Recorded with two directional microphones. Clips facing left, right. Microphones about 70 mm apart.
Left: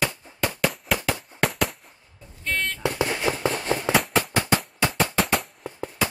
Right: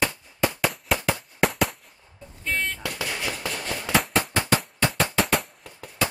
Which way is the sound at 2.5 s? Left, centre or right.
Centre.